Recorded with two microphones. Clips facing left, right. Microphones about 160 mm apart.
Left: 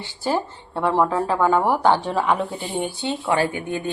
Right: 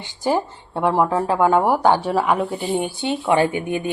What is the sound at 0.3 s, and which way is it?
Speech, 15° right (ahead or behind).